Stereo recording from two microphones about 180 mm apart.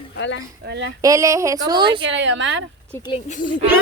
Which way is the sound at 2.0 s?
90° right.